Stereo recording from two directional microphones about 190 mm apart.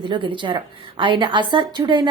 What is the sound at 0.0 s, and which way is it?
Speech, 25° right (ahead or behind).